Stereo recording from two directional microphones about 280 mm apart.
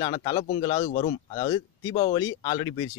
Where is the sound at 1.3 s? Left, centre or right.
Centre.